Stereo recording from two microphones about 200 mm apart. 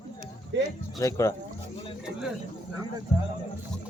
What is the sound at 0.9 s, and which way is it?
Speech, 15° left (ahead or behind).